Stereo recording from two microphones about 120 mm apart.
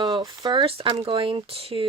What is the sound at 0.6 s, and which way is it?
Speech, 50° right (ahead or behind).